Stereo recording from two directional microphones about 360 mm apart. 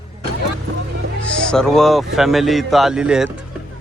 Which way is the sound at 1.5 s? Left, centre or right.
Centre.